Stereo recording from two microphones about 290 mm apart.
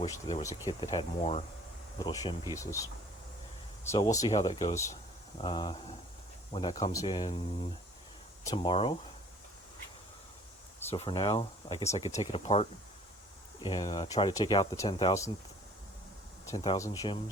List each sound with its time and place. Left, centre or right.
0.0 s speech: centre
10.9 s speech: centre
16.5 s speech: centre